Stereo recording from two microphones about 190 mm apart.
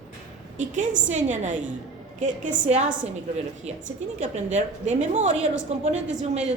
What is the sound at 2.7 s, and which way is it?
Speech, 35° right (ahead or behind).